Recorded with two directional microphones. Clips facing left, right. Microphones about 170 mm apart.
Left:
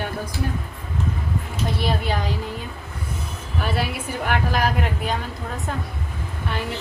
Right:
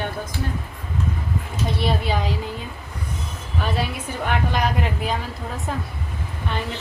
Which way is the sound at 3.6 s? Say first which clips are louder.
Even; 5° left (ahead or behind).